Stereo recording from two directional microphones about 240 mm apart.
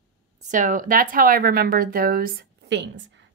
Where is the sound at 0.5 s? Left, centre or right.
Right.